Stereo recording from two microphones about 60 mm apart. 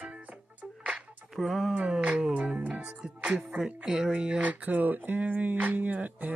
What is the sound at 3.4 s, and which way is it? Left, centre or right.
Speech, centre.